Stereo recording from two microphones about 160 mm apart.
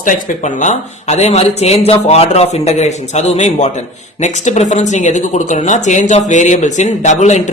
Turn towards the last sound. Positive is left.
turn(degrees=45)  # may be behind; listen again after turning